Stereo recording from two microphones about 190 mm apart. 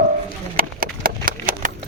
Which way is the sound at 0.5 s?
50° right (ahead or behind).